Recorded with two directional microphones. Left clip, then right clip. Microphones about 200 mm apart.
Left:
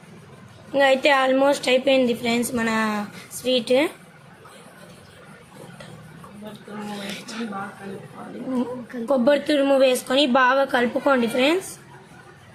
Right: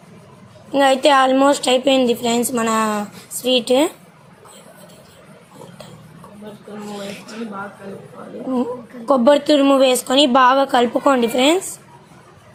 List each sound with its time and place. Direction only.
0.7 s a woman's voice: 25° right (ahead or behind)
9.0 s a woman's voice: 25° right (ahead or behind)